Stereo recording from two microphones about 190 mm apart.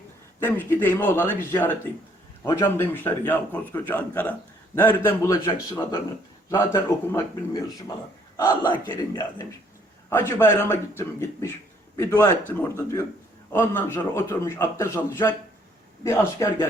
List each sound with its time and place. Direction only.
0.3 s a man's voice: 10° left (ahead or behind)
6.5 s a man's voice: 10° left (ahead or behind)
8.4 s a man's voice: 20° left (ahead or behind)
10.1 s a man's voice: 10° left (ahead or behind)